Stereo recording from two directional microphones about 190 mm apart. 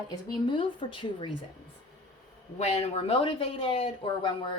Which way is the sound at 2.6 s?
35° left (ahead or behind).